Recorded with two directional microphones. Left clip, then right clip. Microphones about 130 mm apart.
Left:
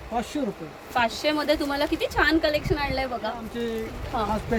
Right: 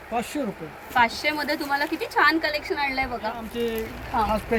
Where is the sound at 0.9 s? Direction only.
35° left (ahead or behind).